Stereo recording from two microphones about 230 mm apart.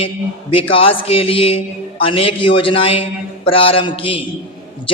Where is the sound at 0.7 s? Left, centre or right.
Left.